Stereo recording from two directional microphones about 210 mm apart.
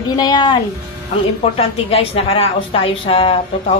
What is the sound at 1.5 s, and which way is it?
A man's voice, 30° left (ahead or behind).